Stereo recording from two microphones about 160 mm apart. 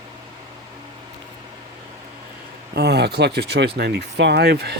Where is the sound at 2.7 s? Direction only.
90° right.